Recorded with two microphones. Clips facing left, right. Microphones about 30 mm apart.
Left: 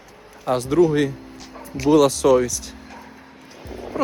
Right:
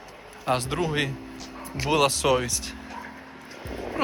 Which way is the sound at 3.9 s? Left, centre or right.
Right.